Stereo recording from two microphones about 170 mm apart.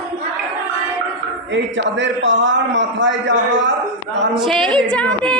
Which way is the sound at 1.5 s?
90° right.